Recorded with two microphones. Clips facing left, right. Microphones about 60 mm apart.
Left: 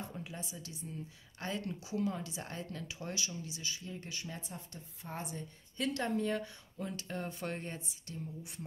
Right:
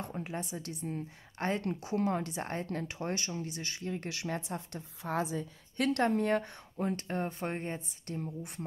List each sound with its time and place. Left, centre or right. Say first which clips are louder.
0.1 s a woman's voice: right 7 dB; right
5.8 s a woman's voice: right 6 dB; right
8.1 s a woman's voice: right 7 dB; right